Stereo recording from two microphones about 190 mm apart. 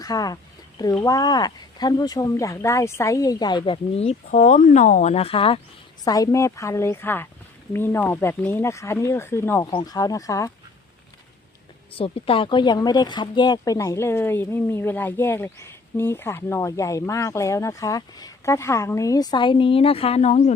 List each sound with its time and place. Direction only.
0.0 s speech: 20° left (ahead or behind)
11.9 s speech: 30° left (ahead or behind)